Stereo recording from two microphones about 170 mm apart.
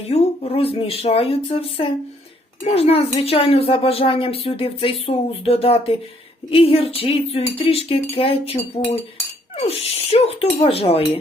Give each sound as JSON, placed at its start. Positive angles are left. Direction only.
{"t": 0.1, "sound": "speech", "side_deg": 35}